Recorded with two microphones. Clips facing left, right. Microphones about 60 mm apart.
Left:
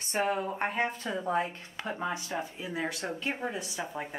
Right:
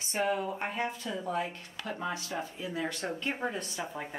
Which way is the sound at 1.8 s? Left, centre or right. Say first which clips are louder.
Left 2 dB; left.